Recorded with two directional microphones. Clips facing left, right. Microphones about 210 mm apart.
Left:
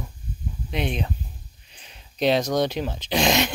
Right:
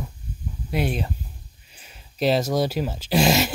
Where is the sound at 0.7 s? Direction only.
5° right (ahead or behind).